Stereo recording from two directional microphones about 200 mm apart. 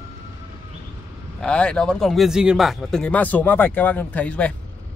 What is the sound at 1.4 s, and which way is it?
Speech, 5° left (ahead or behind).